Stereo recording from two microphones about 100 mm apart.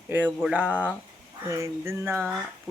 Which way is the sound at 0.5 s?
15° right (ahead or behind).